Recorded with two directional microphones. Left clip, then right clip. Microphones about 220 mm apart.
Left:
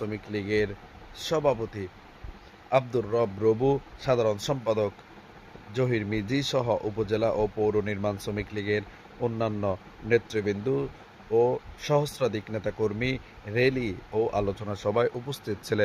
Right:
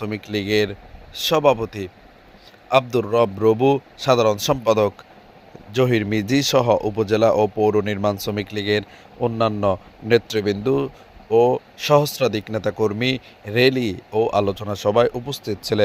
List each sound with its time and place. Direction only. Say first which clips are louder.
0.0 s speech: right 7 dB; 20° right (ahead or behind)